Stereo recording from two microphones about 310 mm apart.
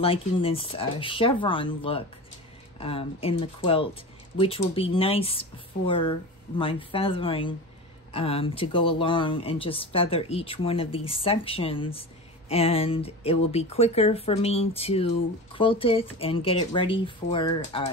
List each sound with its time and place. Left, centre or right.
0.0 s speech: centre